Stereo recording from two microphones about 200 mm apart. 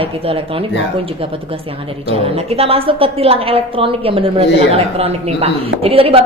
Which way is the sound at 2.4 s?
30° right (ahead or behind).